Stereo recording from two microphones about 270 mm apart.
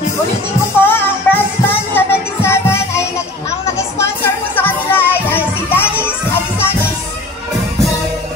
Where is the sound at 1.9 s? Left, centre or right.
Centre.